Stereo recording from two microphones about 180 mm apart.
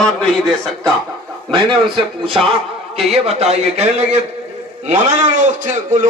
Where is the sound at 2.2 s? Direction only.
30° right (ahead or behind).